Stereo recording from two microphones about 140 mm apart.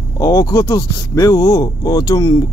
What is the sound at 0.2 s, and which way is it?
Speech, 25° left (ahead or behind).